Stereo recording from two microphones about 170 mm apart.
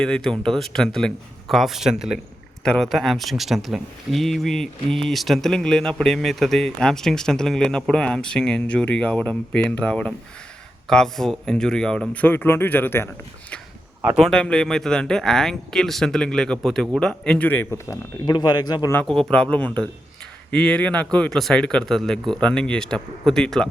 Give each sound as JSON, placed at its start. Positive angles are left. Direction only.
{"t": 0.0, "sound": "speech", "side_deg": 5}
{"t": 14.0, "sound": "a man's voice", "side_deg": -5}
{"t": 18.9, "sound": "speech", "side_deg": 0}